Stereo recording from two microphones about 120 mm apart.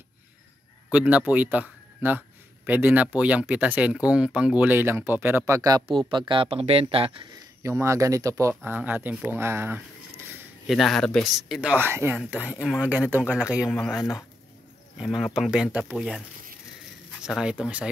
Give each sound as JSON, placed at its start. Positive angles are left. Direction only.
{"t": 0.9, "sound": "speech", "side_deg": -10}
{"t": 5.4, "sound": "speech", "side_deg": -30}
{"t": 6.0, "sound": "speech", "side_deg": -45}
{"t": 7.6, "sound": "speech", "side_deg": -25}
{"t": 8.7, "sound": "speech", "side_deg": -15}
{"t": 10.7, "sound": "speech", "side_deg": 0}
{"t": 11.7, "sound": "speech", "side_deg": -20}
{"t": 13.7, "sound": "speech", "side_deg": 5}
{"t": 15.0, "sound": "speech", "side_deg": 0}
{"t": 17.2, "sound": "speech", "side_deg": -5}